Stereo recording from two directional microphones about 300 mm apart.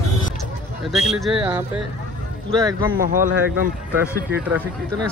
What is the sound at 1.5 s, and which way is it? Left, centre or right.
Speech, centre.